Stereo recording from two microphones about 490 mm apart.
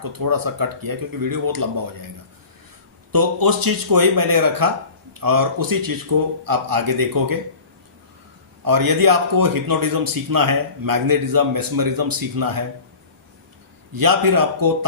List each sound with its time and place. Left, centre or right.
0.1 s a man's voice: right
3.1 s a man's voice: right
8.6 s a man's voice: right
13.9 s a man's voice: right